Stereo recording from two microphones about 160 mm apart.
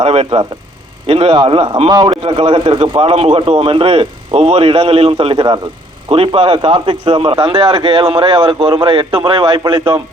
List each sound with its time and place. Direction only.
0.0 s a man's voice: 40° right (ahead or behind)